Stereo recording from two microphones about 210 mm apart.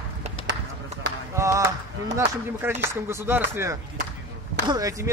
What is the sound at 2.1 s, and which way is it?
Speech, 10° right (ahead or behind).